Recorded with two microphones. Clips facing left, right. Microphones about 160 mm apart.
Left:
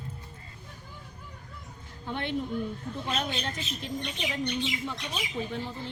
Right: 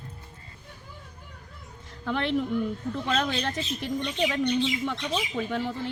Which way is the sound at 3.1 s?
90° right.